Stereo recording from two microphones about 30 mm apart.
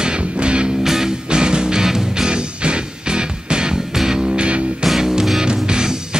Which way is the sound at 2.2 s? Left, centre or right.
Right.